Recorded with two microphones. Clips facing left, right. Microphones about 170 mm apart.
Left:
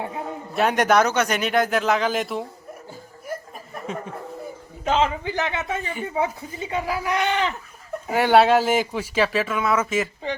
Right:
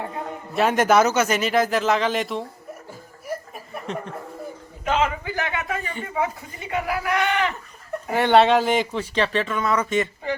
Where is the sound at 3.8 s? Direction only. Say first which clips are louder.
Even; 5° left (ahead or behind).